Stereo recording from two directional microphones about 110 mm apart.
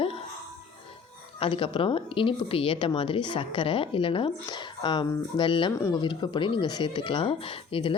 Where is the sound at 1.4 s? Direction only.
55° left (ahead or behind).